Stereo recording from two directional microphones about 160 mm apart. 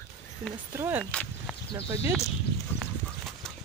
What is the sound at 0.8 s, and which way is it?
Speech, 10° right (ahead or behind).